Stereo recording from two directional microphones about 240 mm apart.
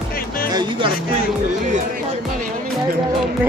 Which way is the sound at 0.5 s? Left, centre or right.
Centre.